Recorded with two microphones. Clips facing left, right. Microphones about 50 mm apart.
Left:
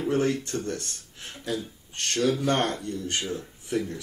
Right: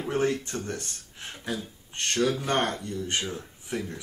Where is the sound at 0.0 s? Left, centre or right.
Centre.